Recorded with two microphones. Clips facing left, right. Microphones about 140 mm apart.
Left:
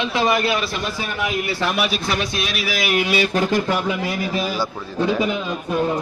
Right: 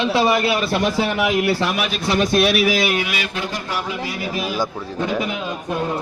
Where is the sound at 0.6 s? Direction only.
60° right (ahead or behind); by 1.5 s 85° right.